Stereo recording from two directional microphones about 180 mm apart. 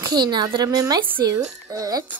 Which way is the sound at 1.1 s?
20° right (ahead or behind).